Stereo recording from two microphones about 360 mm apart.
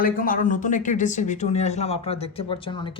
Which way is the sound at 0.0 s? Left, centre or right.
Left.